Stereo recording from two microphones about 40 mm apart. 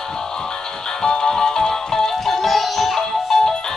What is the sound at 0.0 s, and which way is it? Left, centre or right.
Music, centre.